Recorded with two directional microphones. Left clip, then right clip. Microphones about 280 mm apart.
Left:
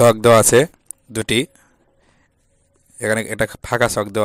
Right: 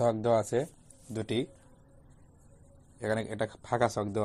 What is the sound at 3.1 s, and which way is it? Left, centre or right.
Speech, left.